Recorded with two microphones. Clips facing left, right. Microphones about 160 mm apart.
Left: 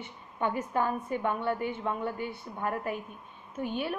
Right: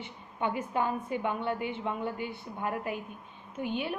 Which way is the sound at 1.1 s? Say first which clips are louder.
Left 1 dB; 45° left (ahead or behind).